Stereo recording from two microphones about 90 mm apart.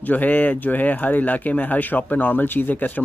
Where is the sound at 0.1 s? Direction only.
20° left (ahead or behind).